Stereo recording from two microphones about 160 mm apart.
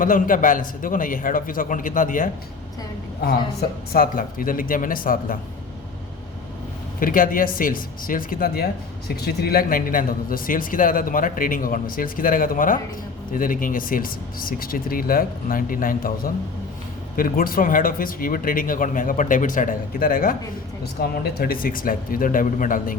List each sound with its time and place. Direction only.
0.0 s speech: 55° left (ahead or behind)
3.6 s speech: 70° left (ahead or behind)
7.0 s speech: 60° left (ahead or behind)
20.8 s speech: 85° left; by 23.0 s 55° left (ahead or behind)